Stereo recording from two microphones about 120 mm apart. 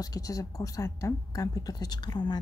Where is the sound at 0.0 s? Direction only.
30° left (ahead or behind).